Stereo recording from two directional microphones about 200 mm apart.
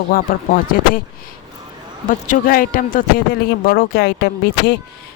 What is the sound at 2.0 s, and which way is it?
A man's voice, 45° left (ahead or behind).